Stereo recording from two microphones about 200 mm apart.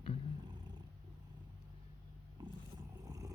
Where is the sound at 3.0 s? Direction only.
15° right (ahead or behind).